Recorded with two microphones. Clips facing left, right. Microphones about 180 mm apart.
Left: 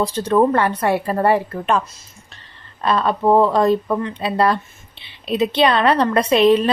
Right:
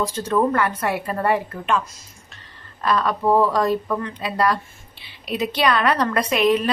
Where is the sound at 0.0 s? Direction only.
30° left (ahead or behind).